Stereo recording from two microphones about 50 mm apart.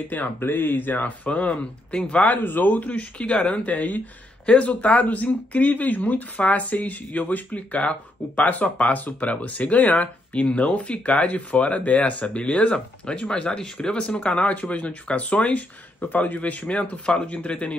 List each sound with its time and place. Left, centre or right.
0.1 s speech: left
1.5 s speech: left
2.3 s speech: left